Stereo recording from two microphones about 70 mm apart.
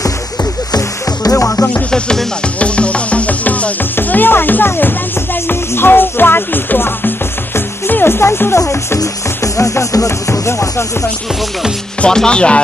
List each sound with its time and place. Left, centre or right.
0.7 s music: left
1.9 s music: centre; by 10.9 s left
12.0 s speech: centre